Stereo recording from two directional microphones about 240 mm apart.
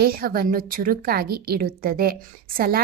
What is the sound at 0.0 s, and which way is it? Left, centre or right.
Speech, right.